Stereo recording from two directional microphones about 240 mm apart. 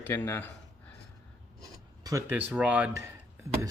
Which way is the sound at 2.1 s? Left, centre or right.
Centre.